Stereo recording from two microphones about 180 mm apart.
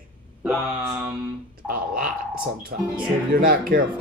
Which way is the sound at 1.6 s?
50° right (ahead or behind).